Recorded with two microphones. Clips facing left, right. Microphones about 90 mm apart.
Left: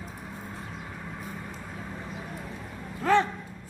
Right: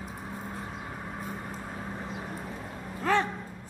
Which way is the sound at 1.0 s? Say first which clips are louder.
Right 1 dB; 25° right (ahead or behind).